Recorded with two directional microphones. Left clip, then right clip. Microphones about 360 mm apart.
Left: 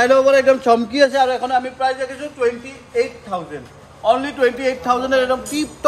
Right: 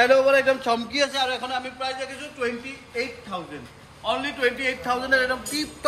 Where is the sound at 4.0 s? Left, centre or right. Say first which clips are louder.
Left 8 dB; left.